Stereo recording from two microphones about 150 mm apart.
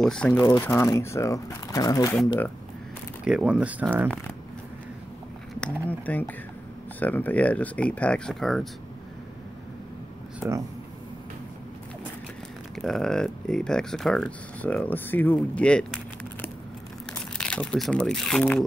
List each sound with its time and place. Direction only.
0.0 s speech: 5° left (ahead or behind)
0.5 s speech: 20° left (ahead or behind)
3.3 s speech: 5° right (ahead or behind)
5.6 s speech: 10° left (ahead or behind)
12.7 s speech: centre (ahead or behind)